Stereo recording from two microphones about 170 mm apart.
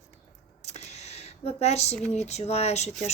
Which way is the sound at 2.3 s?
40° left (ahead or behind).